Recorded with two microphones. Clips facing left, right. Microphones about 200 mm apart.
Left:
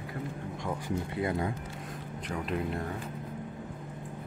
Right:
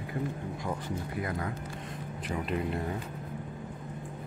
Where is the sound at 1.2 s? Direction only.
25° left (ahead or behind).